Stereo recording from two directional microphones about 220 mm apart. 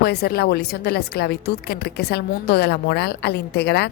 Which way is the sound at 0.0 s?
45° left (ahead or behind).